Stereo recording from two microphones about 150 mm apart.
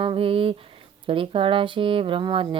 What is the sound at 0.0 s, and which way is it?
Speech, 35° right (ahead or behind).